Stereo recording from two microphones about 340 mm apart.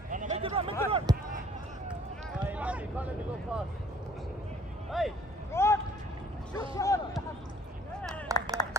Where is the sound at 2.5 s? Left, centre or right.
Centre.